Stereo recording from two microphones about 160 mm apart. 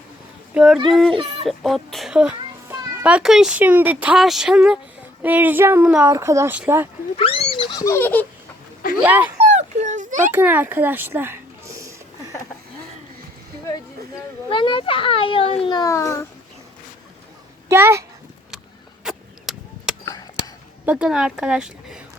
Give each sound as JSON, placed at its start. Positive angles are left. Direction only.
{"t": 0.5, "sound": "a woman's voice", "side_deg": 0}
{"t": 7.2, "sound": "speech", "side_deg": 35}
{"t": 7.9, "sound": "baby laughter", "side_deg": 15}
{"t": 9.0, "sound": "speech", "side_deg": -10}
{"t": 9.4, "sound": "a sound", "side_deg": -45}
{"t": 10.3, "sound": "speech", "side_deg": -10}
{"t": 14.5, "sound": "a child's voice", "side_deg": 30}
{"t": 15.8, "sound": "a child's voice", "side_deg": 20}
{"t": 17.7, "sound": "speech", "side_deg": -15}
{"t": 19.0, "sound": "a sound", "side_deg": -5}
{"t": 20.8, "sound": "a woman's voice", "side_deg": -5}